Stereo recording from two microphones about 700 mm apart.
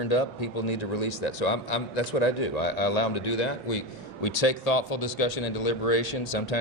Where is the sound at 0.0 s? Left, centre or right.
Left.